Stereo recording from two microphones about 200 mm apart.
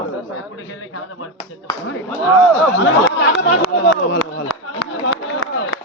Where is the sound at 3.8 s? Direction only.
55° left (ahead or behind).